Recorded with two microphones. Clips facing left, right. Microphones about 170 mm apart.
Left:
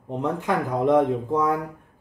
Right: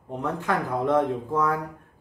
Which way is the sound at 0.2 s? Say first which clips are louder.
Left 2 dB; 20° left (ahead or behind).